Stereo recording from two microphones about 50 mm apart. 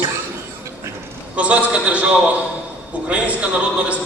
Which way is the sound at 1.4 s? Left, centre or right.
Right.